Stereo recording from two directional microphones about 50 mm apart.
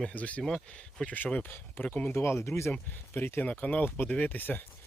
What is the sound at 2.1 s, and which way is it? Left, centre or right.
Speech, left.